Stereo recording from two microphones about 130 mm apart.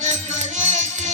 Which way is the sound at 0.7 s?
65° right (ahead or behind).